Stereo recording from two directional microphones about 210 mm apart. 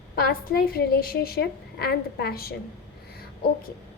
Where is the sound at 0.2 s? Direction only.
45° left (ahead or behind).